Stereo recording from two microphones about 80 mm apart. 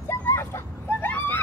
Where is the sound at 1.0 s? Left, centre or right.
Left.